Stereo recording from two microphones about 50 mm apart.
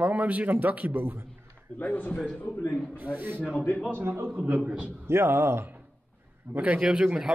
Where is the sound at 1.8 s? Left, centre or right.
Left.